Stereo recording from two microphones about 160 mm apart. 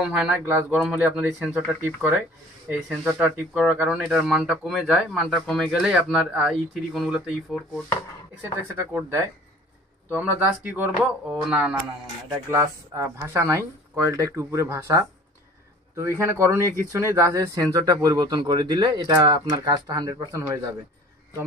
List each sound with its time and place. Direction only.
0.0 s speech: 5° right (ahead or behind)
8.4 s speech: 15° right (ahead or behind)
12.4 s speech: 20° right (ahead or behind)